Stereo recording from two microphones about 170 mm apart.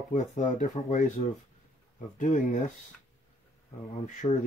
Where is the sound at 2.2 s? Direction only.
50° left (ahead or behind).